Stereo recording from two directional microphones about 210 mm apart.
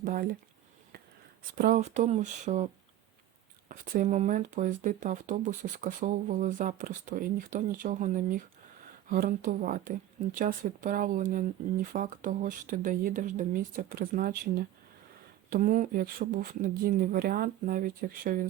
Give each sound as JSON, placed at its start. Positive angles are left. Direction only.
{"t": 0.0, "sound": "speech", "side_deg": -45}
{"t": 1.5, "sound": "speech", "side_deg": -40}
{"t": 3.7, "sound": "speech", "side_deg": -40}
{"t": 15.4, "sound": "speech", "side_deg": -40}